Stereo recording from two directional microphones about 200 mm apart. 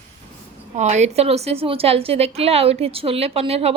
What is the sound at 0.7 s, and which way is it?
A woman's voice, 35° right (ahead or behind).